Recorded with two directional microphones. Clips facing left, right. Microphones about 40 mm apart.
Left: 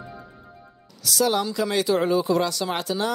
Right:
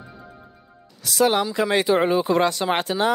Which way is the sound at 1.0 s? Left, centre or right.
Right.